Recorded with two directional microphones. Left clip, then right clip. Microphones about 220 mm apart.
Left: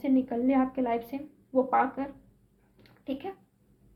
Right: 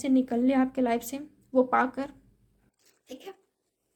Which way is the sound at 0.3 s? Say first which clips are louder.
Right 1 dB; 35° right (ahead or behind).